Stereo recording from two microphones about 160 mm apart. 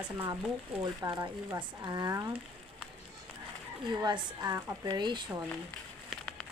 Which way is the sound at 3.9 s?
25° right (ahead or behind).